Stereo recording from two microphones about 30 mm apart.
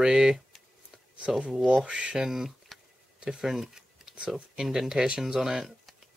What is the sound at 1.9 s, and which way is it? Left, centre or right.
Speech, right.